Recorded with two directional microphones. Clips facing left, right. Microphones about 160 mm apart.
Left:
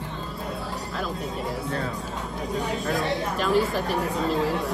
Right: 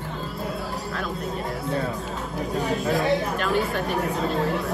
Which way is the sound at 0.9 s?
Centre (ahead or behind).